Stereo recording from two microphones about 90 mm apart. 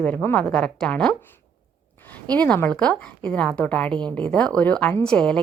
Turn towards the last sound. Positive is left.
turn(degrees=10)  # may be behind; listen again after turning